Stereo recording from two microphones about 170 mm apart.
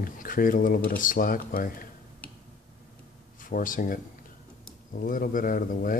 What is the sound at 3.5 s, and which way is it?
Speech, 55° left (ahead or behind).